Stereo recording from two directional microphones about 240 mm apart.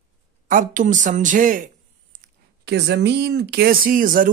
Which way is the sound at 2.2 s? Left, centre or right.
Right.